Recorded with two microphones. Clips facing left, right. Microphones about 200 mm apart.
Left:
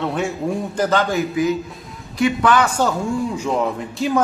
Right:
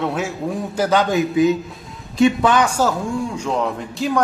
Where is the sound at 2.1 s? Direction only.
25° right (ahead or behind).